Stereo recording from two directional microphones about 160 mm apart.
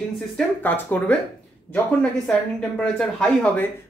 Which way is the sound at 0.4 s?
10° left (ahead or behind).